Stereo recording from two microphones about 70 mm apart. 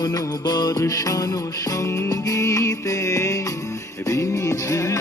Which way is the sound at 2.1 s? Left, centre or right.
Left.